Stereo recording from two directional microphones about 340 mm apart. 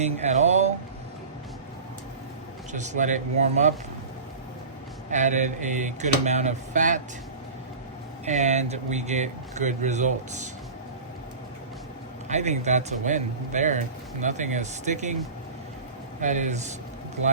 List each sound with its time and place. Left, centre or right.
0.0 s speech: centre
2.7 s speech: right
5.1 s speech: right
8.3 s speech: right
12.3 s speech: centre
16.2 s speech: right